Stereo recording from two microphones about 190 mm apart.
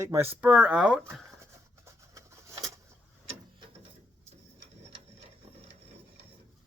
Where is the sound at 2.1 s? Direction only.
15° right (ahead or behind).